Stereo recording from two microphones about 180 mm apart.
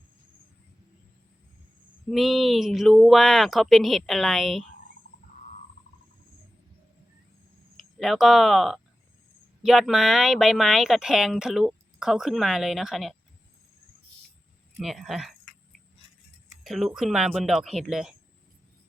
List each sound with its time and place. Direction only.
2.0 s speech: centre (ahead or behind)
7.8 s speech: centre (ahead or behind)
14.8 s speech: centre (ahead or behind)
16.6 s speech: centre (ahead or behind)